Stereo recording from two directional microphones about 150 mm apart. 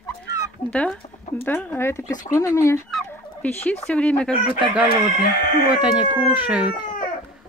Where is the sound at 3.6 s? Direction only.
10° left (ahead or behind).